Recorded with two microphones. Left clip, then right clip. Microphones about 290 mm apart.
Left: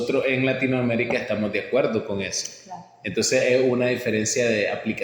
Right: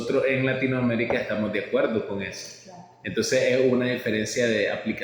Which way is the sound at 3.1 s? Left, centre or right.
Centre.